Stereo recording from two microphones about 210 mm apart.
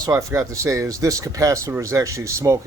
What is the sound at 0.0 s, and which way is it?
Speech, 15° right (ahead or behind).